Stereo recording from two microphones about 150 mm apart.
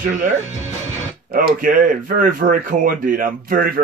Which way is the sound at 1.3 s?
70° right (ahead or behind).